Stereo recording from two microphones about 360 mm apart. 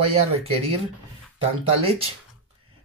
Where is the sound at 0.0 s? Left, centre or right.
Centre.